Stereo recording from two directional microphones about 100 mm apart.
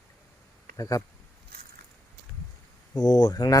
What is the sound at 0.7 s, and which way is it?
Speech, 35° left (ahead or behind).